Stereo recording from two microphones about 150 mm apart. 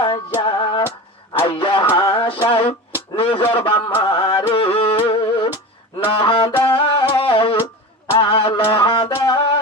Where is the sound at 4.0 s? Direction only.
40° left (ahead or behind).